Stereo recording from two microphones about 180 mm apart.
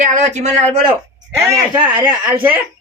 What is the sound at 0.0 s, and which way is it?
Speech, 45° right (ahead or behind).